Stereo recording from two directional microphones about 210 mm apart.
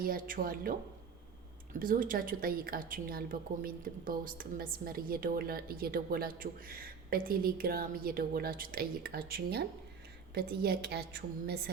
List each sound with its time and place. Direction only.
0.0 s a woman's voice: 45° right (ahead or behind)